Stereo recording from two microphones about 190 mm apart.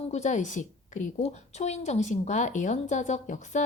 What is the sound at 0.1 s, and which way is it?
A woman's voice, 40° left (ahead or behind).